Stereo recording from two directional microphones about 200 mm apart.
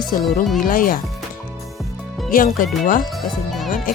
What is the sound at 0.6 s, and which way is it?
Speech, 45° left (ahead or behind).